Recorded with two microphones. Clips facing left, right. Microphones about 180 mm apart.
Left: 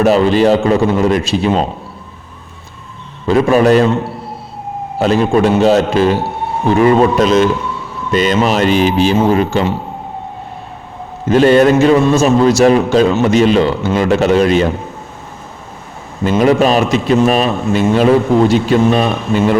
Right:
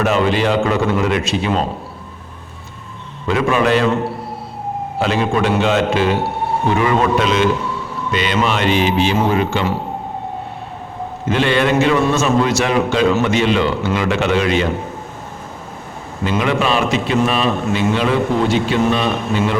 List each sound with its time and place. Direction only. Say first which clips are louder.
0.0 s a man's voice: left 6 dB; 35° left (ahead or behind)
3.2 s a man's voice: left 6 dB; 35° left (ahead or behind)
4.9 s a man's voice: left 6 dB; 40° left (ahead or behind)
11.3 s a man's voice: left 8 dB; 40° left (ahead or behind)
16.4 s a man's voice: left 7 dB; 40° left (ahead or behind)